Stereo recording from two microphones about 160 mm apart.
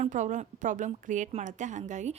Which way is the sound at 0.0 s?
50° right (ahead or behind).